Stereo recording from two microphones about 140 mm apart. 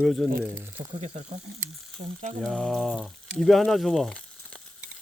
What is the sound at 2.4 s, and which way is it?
Speech, 5° left (ahead or behind).